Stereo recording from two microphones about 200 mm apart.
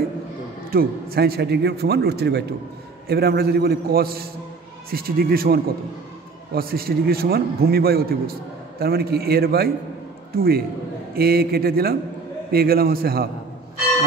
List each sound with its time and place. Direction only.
0.7 s a man's voice: 50° right (ahead or behind)